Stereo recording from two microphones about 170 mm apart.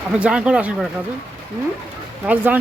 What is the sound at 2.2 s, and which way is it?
Speech, 10° right (ahead or behind).